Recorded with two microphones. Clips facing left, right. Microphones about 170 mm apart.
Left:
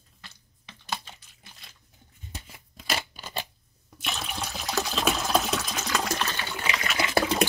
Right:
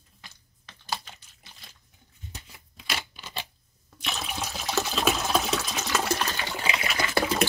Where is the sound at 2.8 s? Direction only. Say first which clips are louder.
Left 3 dB; 40° left (ahead or behind).